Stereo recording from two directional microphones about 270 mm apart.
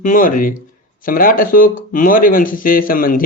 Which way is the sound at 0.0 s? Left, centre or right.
Left.